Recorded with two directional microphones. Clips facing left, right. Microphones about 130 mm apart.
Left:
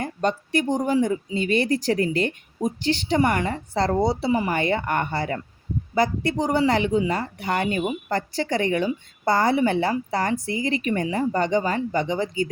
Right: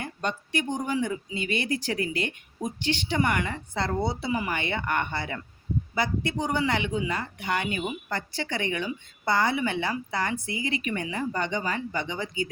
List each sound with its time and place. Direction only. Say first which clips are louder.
0.0 s speech: left 7 dB; 40° left (ahead or behind)